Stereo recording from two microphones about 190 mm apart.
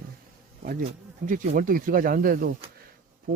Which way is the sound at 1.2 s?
45° right (ahead or behind).